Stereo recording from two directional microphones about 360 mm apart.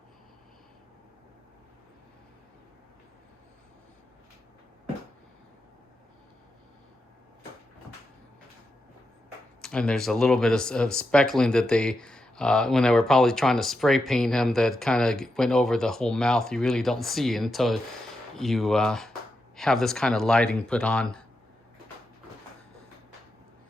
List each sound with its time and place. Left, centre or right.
9.6 s speech: centre